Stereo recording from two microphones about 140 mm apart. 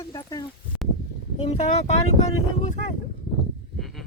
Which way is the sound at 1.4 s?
50° left (ahead or behind).